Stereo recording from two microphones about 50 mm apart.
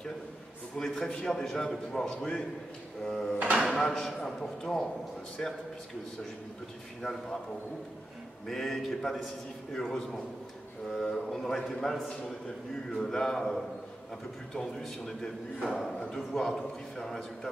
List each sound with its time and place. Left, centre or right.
0.7 s a man's voice: centre
5.4 s a man's voice: centre
7.0 s a man's voice: centre
8.5 s a man's voice: centre